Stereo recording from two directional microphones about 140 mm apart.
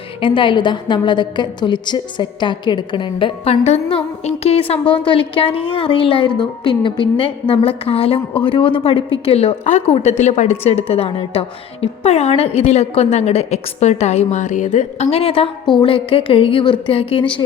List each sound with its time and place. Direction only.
0.2 s a woman's voice: 35° left (ahead or behind)